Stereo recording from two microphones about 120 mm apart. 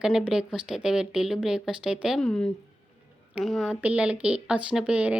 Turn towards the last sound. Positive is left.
turn(degrees=-10)  # may be behind; listen again after turning